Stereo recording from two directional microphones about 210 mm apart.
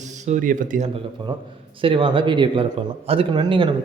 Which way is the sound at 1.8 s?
25° right (ahead or behind).